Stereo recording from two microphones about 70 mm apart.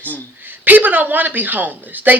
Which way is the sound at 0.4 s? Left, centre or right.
Right.